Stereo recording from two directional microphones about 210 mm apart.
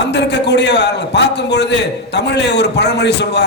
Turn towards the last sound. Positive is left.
turn(degrees=55)  # may be behind; listen again after turning